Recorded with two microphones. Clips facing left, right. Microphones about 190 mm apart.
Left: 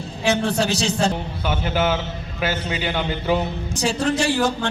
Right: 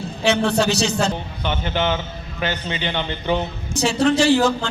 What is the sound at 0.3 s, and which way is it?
Speech, 70° right (ahead or behind).